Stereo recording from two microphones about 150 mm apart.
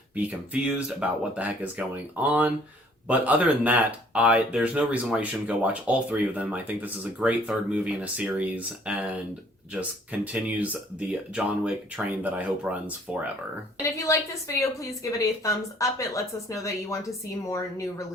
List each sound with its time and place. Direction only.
0.2 s speech: 10° right (ahead or behind)
13.9 s a woman's voice: 20° left (ahead or behind)